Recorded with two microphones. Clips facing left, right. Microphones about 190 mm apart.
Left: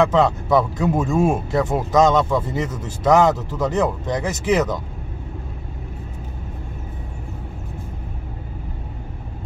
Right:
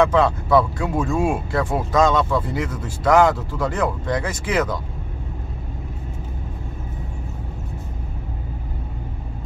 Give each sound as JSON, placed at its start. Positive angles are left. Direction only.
{"t": 0.0, "sound": "speech", "side_deg": 20}